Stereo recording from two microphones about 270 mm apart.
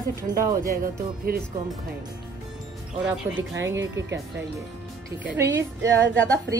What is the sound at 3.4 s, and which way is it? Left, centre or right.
Speech, right.